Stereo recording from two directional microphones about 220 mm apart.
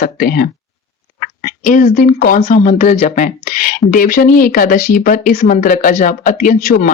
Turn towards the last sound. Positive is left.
turn(degrees=35)  # may be behind; listen again after turning